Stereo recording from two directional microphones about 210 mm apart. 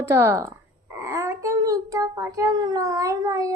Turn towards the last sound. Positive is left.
turn(degrees=-15)  # may be behind; listen again after turning